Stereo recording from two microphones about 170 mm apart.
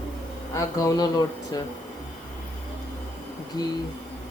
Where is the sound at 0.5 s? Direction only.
20° left (ahead or behind).